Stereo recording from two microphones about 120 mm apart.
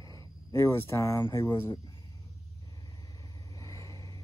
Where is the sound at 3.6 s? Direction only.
25° left (ahead or behind).